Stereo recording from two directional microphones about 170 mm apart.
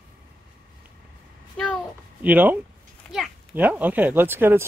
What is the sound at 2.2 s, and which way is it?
Speech, 10° right (ahead or behind).